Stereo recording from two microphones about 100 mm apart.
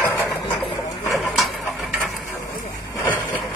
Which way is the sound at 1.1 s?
Centre (ahead or behind).